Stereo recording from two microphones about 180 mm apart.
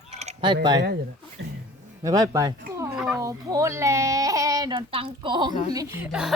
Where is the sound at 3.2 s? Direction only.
20° right (ahead or behind).